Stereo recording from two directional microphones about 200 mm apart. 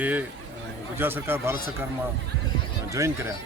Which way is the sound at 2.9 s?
15° right (ahead or behind).